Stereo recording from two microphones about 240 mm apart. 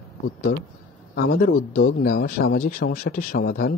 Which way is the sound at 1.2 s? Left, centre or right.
Left.